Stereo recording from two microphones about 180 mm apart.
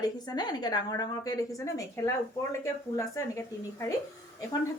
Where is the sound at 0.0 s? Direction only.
25° left (ahead or behind).